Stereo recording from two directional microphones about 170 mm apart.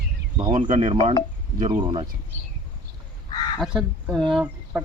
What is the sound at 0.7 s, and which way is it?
Speech, 40° right (ahead or behind).